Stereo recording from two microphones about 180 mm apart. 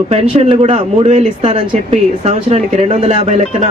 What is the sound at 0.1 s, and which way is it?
Speech, 35° right (ahead or behind).